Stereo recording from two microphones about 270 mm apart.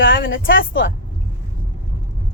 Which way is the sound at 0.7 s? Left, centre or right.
Left.